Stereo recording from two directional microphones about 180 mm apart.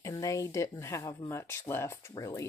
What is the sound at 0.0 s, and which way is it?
Speech, 20° left (ahead or behind).